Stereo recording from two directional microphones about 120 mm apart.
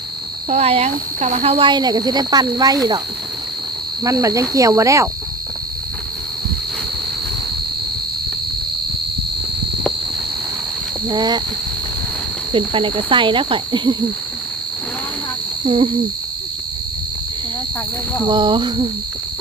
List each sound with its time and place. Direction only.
0.4 s speech: 60° right (ahead or behind); by 3.0 s 30° right (ahead or behind)
4.0 s cricket: 25° right (ahead or behind)
11.1 s speech: 35° right (ahead or behind)
12.5 s cricket: 45° right (ahead or behind)
15.6 s cricket: 50° right (ahead or behind)
18.3 s speech: 40° right (ahead or behind)